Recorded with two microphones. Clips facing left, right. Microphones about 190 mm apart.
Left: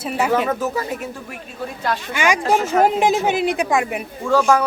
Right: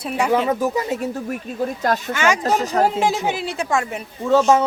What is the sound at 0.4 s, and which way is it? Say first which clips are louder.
Speech: right 2 dB; 15° right (ahead or behind).